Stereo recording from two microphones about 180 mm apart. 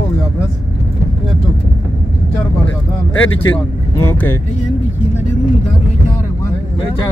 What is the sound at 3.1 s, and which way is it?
Speech, 90° left.